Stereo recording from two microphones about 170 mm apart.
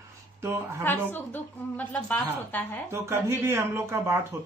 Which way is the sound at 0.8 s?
10° left (ahead or behind).